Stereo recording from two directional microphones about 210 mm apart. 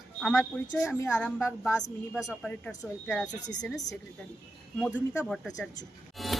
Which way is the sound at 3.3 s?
35° left (ahead or behind).